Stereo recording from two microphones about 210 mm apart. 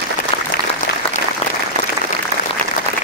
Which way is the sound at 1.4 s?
30° left (ahead or behind).